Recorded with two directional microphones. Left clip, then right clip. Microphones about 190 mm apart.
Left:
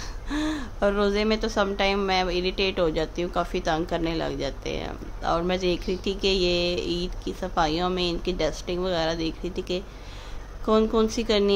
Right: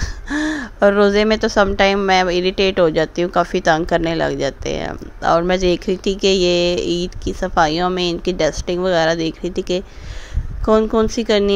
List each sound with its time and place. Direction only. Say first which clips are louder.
0.0 s speech: right 8 dB; 35° right (ahead or behind)